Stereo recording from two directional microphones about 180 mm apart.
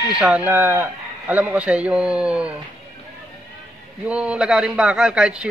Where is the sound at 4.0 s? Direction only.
5° right (ahead or behind).